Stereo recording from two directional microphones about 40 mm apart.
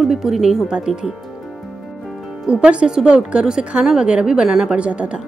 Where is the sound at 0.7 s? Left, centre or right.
Centre.